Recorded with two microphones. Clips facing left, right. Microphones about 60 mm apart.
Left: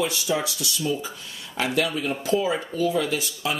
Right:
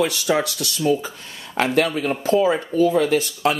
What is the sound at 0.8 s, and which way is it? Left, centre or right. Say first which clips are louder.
Speech: right 8 dB; right.